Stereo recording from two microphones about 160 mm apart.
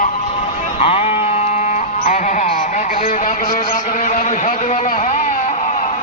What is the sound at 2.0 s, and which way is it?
Music, 50° left (ahead or behind).